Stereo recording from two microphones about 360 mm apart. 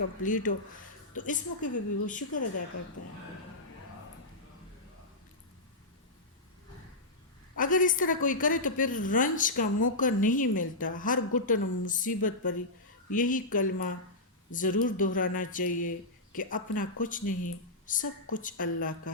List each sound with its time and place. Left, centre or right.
0.2 s a woman's voice: left
7.5 s a woman's voice: left